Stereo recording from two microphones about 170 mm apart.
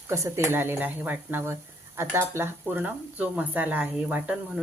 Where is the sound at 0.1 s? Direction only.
15° right (ahead or behind).